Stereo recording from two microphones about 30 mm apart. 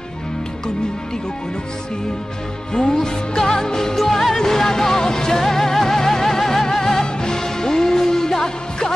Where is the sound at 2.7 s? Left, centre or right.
Centre.